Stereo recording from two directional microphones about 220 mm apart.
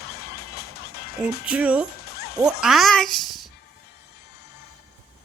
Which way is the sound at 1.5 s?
5° right (ahead or behind).